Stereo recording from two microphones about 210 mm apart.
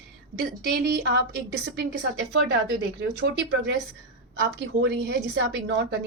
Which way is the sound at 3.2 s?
55° right (ahead or behind).